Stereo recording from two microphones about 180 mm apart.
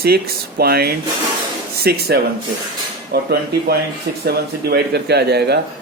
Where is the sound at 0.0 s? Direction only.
60° right (ahead or behind).